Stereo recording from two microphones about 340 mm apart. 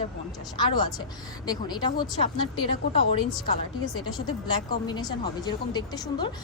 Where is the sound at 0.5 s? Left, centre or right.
Centre.